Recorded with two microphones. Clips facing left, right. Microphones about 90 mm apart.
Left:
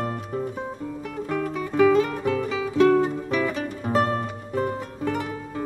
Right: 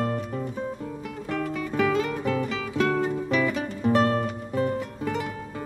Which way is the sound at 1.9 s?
40° left (ahead or behind).